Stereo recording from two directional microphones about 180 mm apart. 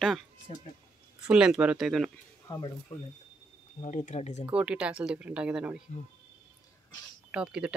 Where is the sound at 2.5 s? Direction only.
20° left (ahead or behind).